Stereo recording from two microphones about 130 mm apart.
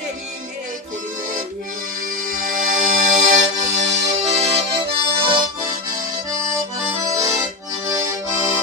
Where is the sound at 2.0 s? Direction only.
90° right; by 4.6 s 55° right (ahead or behind).